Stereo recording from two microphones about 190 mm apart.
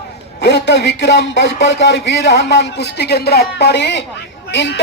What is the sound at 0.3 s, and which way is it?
A man's voice, 65° left (ahead or behind).